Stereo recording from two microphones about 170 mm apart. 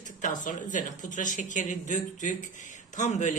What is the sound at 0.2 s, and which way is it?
Speech, 50° left (ahead or behind).